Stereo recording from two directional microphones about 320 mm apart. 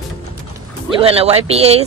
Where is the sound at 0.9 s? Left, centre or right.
Centre.